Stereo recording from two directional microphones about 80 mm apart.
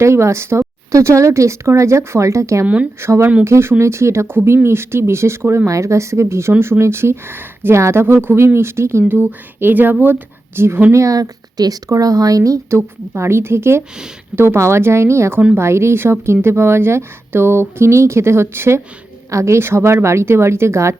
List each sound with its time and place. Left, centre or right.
0.0 s speech: right
10.9 s speech: right